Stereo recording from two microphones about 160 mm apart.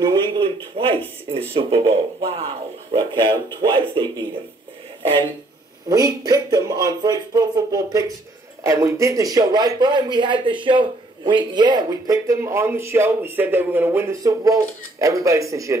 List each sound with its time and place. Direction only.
0.0 s a man's voice: 30° right (ahead or behind)
5.9 s a man's voice: 25° right (ahead or behind)